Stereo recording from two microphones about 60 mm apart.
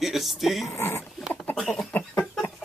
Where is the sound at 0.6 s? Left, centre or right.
Left.